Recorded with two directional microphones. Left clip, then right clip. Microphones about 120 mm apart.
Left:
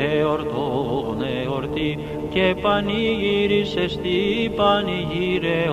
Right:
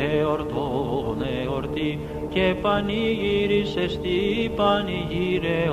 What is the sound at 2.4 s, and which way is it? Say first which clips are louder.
Mantra: left 3 dB; 35° left (ahead or behind).